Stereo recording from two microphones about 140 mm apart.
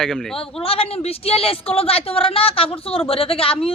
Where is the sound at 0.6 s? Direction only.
45° left (ahead or behind).